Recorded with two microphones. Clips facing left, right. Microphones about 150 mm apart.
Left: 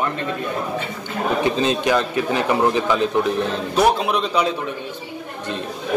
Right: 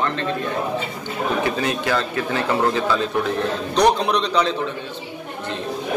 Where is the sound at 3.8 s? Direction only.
5° left (ahead or behind).